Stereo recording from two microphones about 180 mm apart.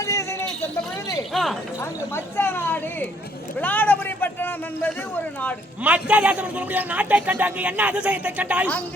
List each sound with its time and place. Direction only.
0.0 s a sound: 15° left (ahead or behind)
1.3 s speech: centre (ahead or behind)
1.8 s speech: 15° left (ahead or behind)
5.8 s a man's voice: 10° right (ahead or behind)